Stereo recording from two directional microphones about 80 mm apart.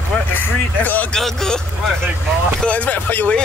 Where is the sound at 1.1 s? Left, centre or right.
Centre.